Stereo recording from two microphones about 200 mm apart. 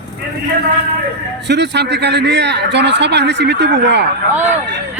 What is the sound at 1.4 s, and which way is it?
Speech, 60° right (ahead or behind).